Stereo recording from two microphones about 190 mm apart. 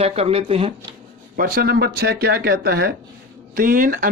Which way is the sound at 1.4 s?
50° right (ahead or behind).